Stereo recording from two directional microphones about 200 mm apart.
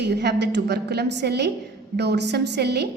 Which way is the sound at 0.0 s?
55° right (ahead or behind).